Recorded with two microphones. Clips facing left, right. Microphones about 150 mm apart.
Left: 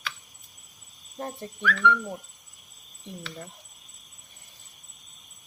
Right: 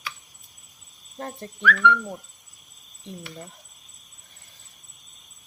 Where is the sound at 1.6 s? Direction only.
60° right (ahead or behind).